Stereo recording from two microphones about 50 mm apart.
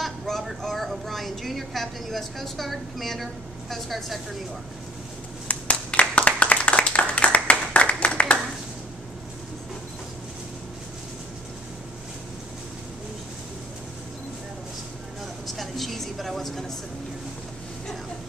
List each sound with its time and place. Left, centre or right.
0.0 s a woman's voice: centre
5.5 s clapping: left
15.4 s a sound: centre